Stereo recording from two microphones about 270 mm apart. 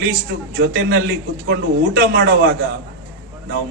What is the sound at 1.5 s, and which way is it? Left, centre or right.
Speech, right.